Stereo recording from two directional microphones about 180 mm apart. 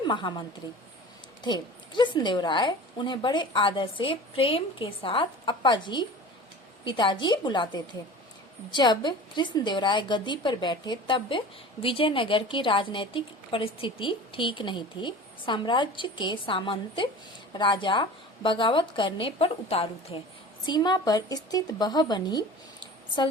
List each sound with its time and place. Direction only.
0.1 s a woman's voice: 25° left (ahead or behind)